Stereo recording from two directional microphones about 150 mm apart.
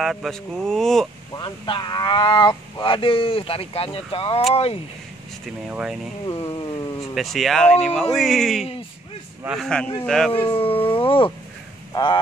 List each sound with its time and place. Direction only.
0.0 s speech: centre (ahead or behind)
1.3 s speech: 30° left (ahead or behind)
5.7 s speech: 10° right (ahead or behind)
6.4 s a sound: 40° left (ahead or behind)
7.2 s speech: centre (ahead or behind)
10.4 s speech: 40° left (ahead or behind)